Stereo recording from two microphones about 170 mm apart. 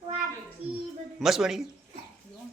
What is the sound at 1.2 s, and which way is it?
Speech, centre (ahead or behind).